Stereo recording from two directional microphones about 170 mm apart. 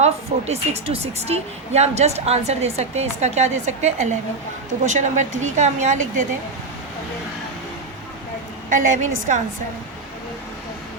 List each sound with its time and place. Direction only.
0.0 s a woman's voice: 40° right (ahead or behind)
8.7 s a woman's voice: 50° right (ahead or behind)